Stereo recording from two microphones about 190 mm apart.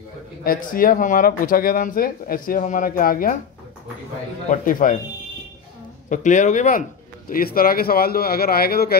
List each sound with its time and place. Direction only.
0.4 s speech: 50° left (ahead or behind)
4.5 s speech: 45° left (ahead or behind)
6.0 s a man's voice: 40° left (ahead or behind)
7.2 s speech: 50° left (ahead or behind)